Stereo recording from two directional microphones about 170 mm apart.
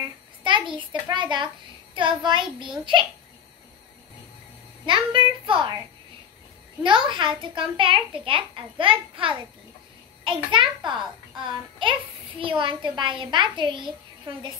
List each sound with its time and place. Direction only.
0.4 s a sound: 30° right (ahead or behind)
1.0 s a child's voice: 25° right (ahead or behind)
4.8 s a child's voice: 30° right (ahead or behind)